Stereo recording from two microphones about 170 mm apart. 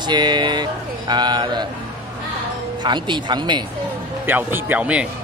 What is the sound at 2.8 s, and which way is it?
Speech, 25° right (ahead or behind).